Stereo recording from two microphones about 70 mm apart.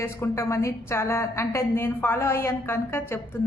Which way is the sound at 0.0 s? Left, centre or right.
Left.